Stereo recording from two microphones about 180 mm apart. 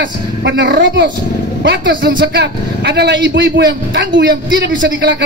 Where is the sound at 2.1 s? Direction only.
60° right (ahead or behind).